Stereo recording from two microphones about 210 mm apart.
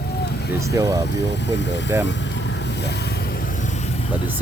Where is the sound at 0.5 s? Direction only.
15° right (ahead or behind).